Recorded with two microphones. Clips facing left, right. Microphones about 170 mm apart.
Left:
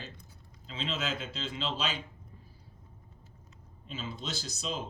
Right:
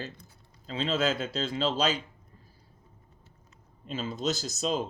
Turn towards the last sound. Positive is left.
turn(degrees=-45)  # may be behind; listen again after turning